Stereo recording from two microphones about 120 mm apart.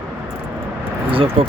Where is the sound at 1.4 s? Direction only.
50° right (ahead or behind).